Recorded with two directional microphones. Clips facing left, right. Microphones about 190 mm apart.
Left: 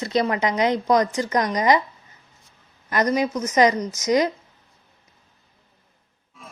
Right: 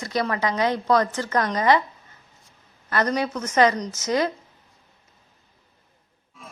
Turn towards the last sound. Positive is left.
turn(degrees=0)  # may be behind; listen again after turning